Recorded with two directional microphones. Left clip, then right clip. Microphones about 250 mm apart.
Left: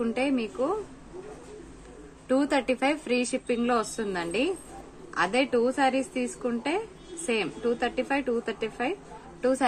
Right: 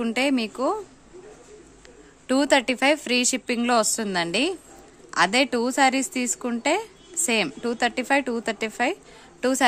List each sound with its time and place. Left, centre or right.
0.0 s a woman's voice: right
2.2 s a woman's voice: right